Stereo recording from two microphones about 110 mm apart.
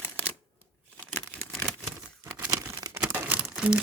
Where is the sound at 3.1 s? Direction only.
15° right (ahead or behind).